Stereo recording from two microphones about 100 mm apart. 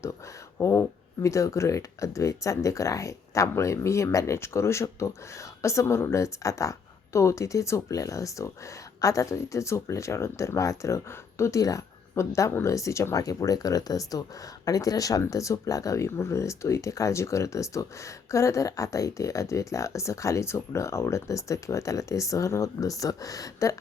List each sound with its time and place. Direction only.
0.6 s speech: 30° left (ahead or behind)